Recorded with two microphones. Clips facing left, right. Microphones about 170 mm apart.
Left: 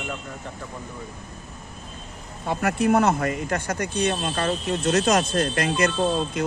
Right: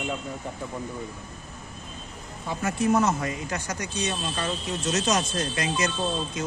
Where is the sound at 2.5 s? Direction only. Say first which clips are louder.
Left 3 dB; 60° left (ahead or behind).